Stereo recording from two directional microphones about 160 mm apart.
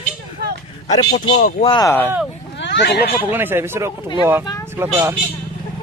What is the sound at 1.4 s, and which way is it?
Speech, 60° left (ahead or behind).